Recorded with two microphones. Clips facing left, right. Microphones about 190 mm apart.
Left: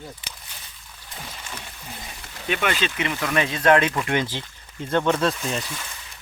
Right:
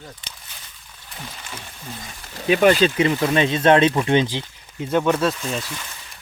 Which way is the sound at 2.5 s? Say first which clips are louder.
Right 10 dB; 35° right (ahead or behind).